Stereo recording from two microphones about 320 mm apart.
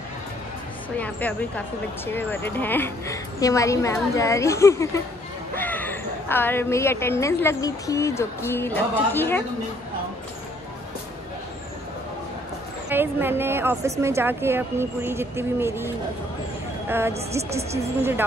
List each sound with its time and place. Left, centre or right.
0.9 s a woman's voice: centre
12.9 s a woman's voice: centre
17.4 s speech: centre